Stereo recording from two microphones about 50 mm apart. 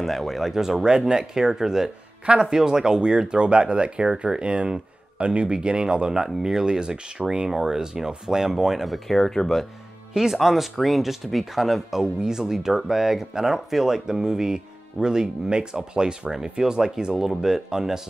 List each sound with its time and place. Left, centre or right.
0.0 s speech: centre
10.1 s speech: centre